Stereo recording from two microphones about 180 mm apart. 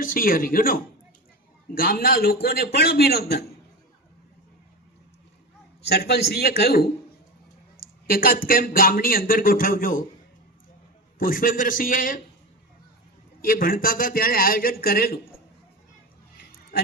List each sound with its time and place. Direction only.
0.0 s a man's voice: 50° left (ahead or behind)
5.9 s a man's voice: 60° left (ahead or behind)
11.2 s speech: 50° left (ahead or behind)
13.4 s speech: 50° left (ahead or behind)